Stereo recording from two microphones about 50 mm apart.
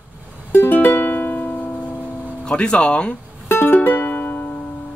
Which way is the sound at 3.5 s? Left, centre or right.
Left.